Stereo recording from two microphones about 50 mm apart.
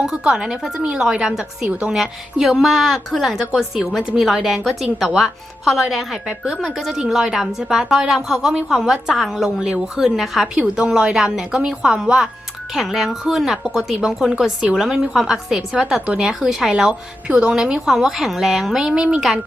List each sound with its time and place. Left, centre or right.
0.0 s a woman's voice: centre
2.0 s speech: centre
10.8 s speech: centre
16.0 s a woman's voice: right
16.2 s speech: centre